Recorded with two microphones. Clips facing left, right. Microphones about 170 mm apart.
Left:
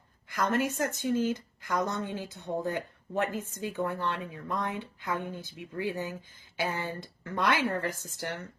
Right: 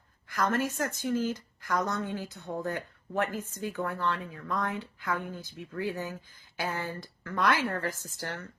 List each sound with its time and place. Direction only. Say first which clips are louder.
0.3 s speech: even; 20° left (ahead or behind)